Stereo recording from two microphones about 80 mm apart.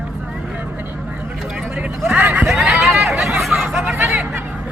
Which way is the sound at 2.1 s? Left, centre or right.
Centre.